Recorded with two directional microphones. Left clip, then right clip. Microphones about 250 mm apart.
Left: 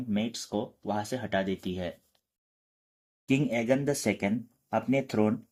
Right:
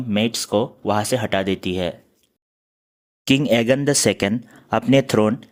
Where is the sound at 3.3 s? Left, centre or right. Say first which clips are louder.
Right 10 dB; right.